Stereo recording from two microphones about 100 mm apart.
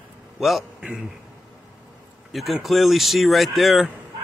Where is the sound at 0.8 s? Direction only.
10° right (ahead or behind).